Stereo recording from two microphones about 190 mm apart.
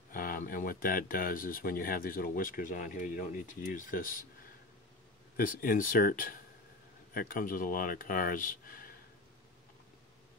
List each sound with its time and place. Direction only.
0.1 s speech: 45° left (ahead or behind)
5.4 s speech: 50° left (ahead or behind)